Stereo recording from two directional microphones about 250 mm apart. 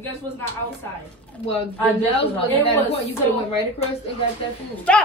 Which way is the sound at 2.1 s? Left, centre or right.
Left.